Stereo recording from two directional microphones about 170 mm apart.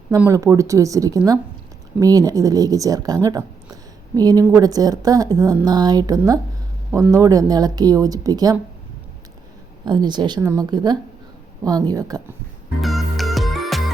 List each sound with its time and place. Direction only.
0.2 s a woman's voice: 20° right (ahead or behind)
9.8 s speech: 25° right (ahead or behind)
12.8 s music: centre (ahead or behind)